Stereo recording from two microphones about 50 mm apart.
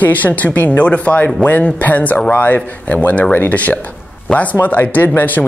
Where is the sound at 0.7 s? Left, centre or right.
Left.